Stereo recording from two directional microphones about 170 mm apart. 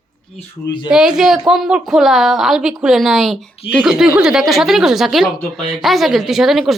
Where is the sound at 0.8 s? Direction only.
5° right (ahead or behind).